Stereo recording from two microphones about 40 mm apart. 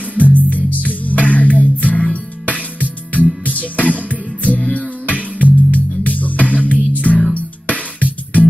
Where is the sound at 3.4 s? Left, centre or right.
Left.